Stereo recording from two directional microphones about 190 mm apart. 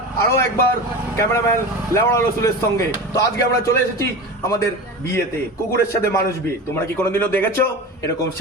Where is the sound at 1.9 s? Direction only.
15° left (ahead or behind).